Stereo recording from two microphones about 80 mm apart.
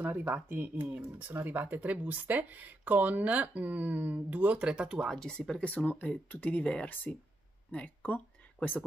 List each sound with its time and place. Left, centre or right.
0.3 s speech: right; by 5.1 s centre
5.1 s speech: centre; by 8.8 s left